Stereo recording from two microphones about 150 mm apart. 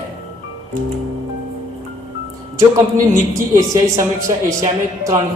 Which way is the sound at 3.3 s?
20° right (ahead or behind).